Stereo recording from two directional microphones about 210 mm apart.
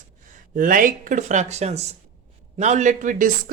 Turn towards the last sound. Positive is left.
turn(degrees=-35)  # may be behind; listen again after turning